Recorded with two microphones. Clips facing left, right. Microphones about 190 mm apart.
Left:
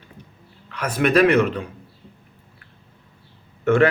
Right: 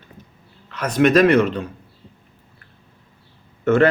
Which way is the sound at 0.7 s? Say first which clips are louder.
Right 3 dB; 10° left (ahead or behind).